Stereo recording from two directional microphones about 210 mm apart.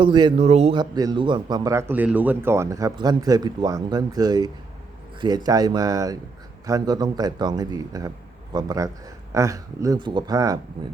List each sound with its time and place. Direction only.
0.0 s a man's voice: 20° right (ahead or behind)